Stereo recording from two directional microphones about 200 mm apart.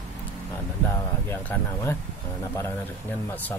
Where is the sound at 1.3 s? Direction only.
10° left (ahead or behind).